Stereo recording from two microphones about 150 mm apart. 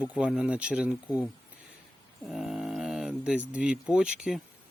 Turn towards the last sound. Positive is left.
turn(degrees=0)  # may be behind; listen again after turning